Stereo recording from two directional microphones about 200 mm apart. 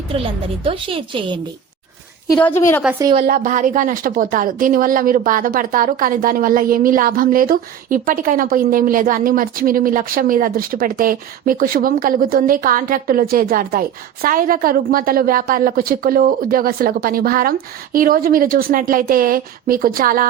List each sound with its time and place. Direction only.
0.1 s a woman's voice: 30° right (ahead or behind)
2.4 s a woman's voice: 10° left (ahead or behind)
3.2 s speech: 45° right (ahead or behind)